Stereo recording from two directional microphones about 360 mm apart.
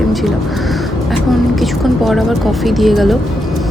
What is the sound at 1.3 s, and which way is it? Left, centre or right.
Speech, centre.